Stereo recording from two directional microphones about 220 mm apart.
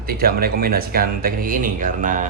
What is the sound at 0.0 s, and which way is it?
A man's voice, 40° right (ahead or behind).